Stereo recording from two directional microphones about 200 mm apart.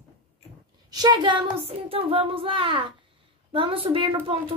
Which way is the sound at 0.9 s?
20° right (ahead or behind).